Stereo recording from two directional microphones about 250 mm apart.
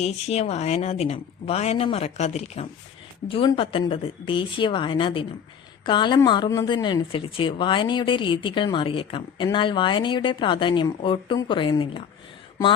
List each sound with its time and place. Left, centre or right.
0.0 s a woman's voice: left